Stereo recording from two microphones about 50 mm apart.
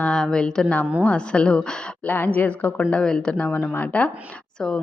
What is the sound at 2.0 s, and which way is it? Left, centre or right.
Speech, left.